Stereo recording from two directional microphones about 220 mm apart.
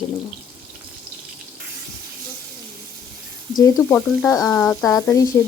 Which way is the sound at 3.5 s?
15° left (ahead or behind).